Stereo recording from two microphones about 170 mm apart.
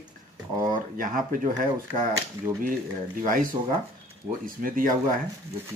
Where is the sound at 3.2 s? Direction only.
55° right (ahead or behind).